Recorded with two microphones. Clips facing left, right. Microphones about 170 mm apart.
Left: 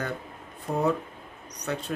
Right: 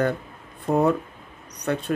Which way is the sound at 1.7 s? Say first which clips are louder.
Right 6 dB; 60° right (ahead or behind).